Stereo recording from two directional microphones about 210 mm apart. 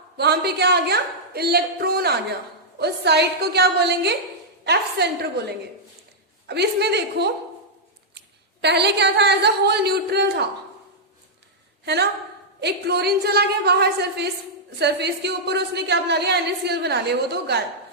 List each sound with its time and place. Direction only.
0.2 s a woman's voice: 50° right (ahead or behind)
6.5 s a woman's voice: 50° right (ahead or behind)
8.6 s a woman's voice: 55° right (ahead or behind)
12.5 s a woman's voice: 50° right (ahead or behind)